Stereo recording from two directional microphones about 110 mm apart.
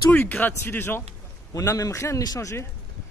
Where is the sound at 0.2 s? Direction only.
15° left (ahead or behind).